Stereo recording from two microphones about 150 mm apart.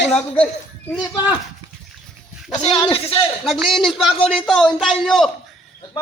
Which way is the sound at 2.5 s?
45° left (ahead or behind).